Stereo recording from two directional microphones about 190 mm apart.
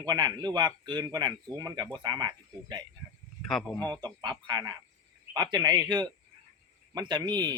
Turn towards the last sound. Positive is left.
turn(degrees=-20)  # may be behind; listen again after turning